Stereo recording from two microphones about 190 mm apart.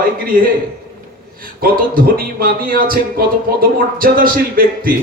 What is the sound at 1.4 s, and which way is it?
Speech, 50° right (ahead or behind).